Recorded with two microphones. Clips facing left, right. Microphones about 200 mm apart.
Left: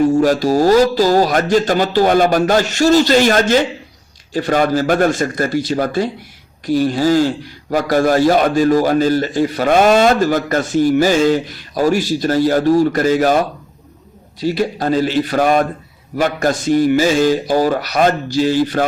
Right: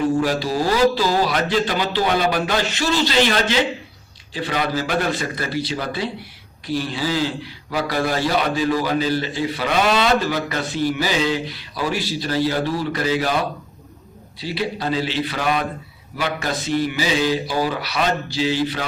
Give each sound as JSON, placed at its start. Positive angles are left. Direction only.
{"t": 0.1, "sound": "speech", "side_deg": 45}